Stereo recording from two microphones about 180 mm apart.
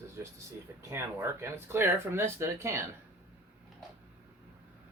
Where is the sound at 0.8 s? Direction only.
15° right (ahead or behind).